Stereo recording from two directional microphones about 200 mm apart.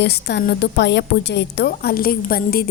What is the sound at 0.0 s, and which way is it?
A woman's voice, 55° left (ahead or behind).